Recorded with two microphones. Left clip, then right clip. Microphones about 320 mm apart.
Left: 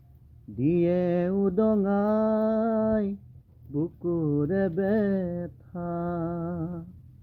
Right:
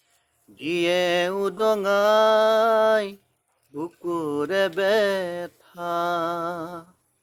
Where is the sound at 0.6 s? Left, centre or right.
Centre.